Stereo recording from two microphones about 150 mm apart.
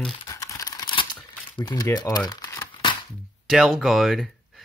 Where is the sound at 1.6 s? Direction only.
25° left (ahead or behind).